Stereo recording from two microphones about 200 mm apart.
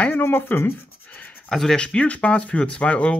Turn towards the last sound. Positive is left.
turn(degrees=5)  # may be behind; listen again after turning